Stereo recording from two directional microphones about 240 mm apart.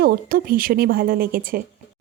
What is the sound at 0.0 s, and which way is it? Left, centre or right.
A woman's voice, right.